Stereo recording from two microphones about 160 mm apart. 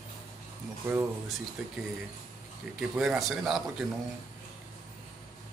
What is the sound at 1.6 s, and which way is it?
Speech, centre (ahead or behind).